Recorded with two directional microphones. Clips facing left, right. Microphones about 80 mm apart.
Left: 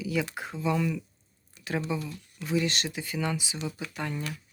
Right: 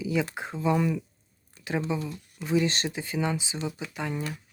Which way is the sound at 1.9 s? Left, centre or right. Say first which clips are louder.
Right 2 dB; right.